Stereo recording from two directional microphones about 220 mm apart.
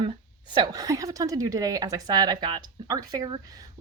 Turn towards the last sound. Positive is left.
turn(degrees=-15)  # may be behind; listen again after turning